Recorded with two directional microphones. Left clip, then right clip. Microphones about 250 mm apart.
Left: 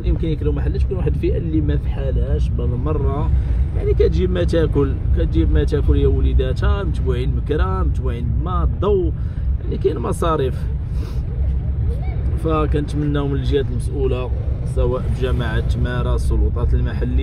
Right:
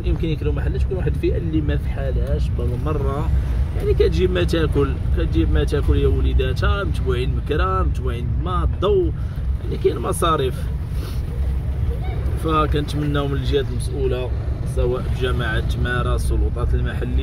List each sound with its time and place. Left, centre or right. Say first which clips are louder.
0.0 s speech: left 1 dB; centre
2.8 s speech: left 1 dB; centre
12.4 s speech: even; centre